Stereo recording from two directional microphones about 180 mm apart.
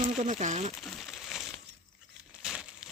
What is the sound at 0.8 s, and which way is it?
Crumpling, centre (ahead or behind).